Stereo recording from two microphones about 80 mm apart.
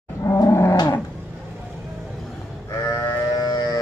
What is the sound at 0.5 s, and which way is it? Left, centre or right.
Roaring cats, left.